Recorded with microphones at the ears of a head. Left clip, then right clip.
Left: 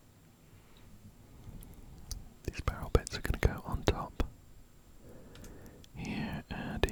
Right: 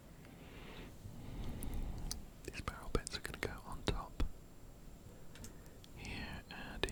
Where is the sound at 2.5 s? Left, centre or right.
Left.